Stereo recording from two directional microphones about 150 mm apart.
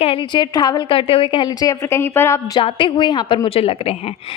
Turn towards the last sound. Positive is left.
turn(degrees=40)  # may be behind; listen again after turning